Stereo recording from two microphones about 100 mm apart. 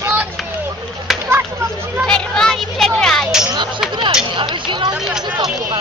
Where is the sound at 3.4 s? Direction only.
50° right (ahead or behind).